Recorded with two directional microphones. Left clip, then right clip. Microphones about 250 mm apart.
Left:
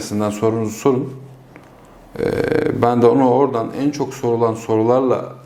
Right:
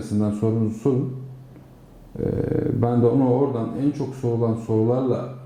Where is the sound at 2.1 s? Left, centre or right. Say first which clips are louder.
Left 7 dB; centre.